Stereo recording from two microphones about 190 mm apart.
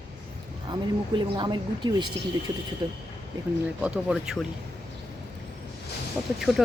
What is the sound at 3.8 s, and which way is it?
Speech, 5° right (ahead or behind).